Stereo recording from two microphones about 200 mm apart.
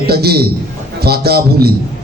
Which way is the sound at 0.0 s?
50° right (ahead or behind).